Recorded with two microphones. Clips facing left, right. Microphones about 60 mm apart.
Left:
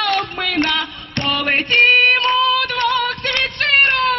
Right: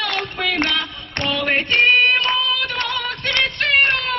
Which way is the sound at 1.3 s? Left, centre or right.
Left.